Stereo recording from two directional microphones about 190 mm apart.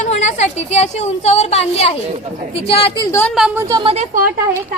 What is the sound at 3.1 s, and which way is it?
Speech, 10° left (ahead or behind).